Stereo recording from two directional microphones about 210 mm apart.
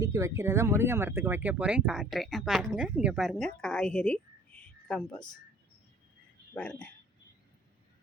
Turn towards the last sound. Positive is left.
turn(degrees=5)  # may be behind; listen again after turning